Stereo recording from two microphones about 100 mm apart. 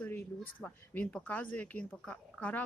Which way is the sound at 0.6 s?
10° left (ahead or behind).